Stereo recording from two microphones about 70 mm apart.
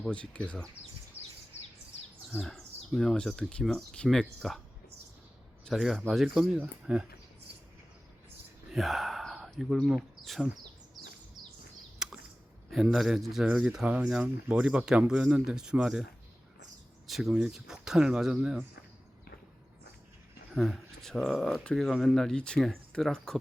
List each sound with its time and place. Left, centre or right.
0.1 s speech: centre
2.4 s speech: centre
5.7 s a man's voice: centre
8.7 s speech: centre
12.0 s a sound: centre
12.7 s a man's voice: centre
17.1 s speech: centre
20.5 s speech: centre